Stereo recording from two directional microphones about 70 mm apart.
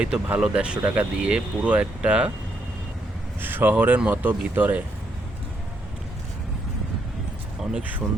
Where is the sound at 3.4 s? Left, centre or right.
Right.